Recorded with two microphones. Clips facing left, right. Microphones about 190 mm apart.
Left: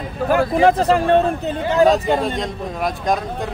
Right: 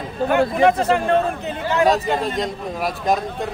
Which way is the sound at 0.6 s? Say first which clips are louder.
Left 4 dB; 35° left (ahead or behind).